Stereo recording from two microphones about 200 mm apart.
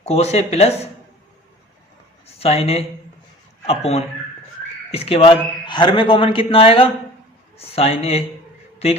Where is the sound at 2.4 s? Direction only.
30° left (ahead or behind).